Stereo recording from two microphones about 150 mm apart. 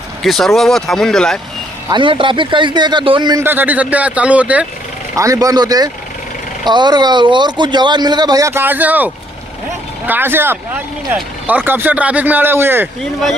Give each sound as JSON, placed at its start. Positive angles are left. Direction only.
{"t": 0.2, "sound": "speech", "side_deg": 0}
{"t": 1.9, "sound": "speech", "side_deg": -35}
{"t": 3.4, "sound": "speech", "side_deg": -10}
{"t": 5.1, "sound": "speech", "side_deg": -20}